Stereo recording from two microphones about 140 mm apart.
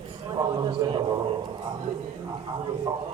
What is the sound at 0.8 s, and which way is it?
Speech, 25° right (ahead or behind).